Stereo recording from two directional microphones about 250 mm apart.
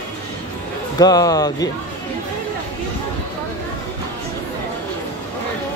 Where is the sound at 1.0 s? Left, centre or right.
Centre.